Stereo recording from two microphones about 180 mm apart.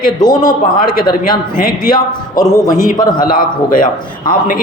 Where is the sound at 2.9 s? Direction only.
25° left (ahead or behind).